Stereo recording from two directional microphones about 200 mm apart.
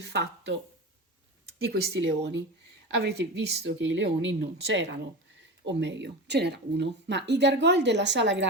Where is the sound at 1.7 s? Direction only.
55° right (ahead or behind).